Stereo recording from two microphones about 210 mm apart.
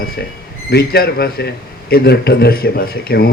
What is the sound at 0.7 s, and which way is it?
A man's voice, 50° left (ahead or behind).